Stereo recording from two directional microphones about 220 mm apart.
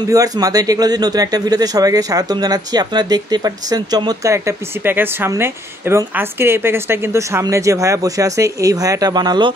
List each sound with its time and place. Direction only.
0.1 s speech: 15° right (ahead or behind)